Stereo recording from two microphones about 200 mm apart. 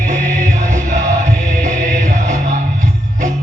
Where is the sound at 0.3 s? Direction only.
40° right (ahead or behind).